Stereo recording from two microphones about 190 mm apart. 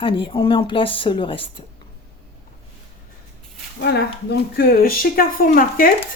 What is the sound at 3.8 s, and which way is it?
Speech, 60° left (ahead or behind).